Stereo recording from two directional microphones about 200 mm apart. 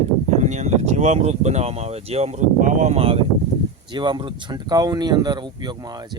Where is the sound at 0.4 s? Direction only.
35° right (ahead or behind).